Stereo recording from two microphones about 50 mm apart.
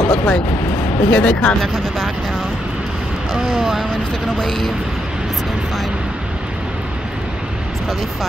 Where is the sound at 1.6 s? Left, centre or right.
Centre.